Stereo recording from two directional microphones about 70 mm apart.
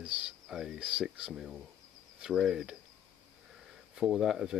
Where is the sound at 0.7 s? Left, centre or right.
Centre.